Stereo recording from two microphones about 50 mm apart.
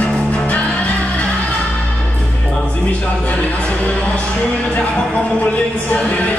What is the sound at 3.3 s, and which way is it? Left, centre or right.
Speech, left.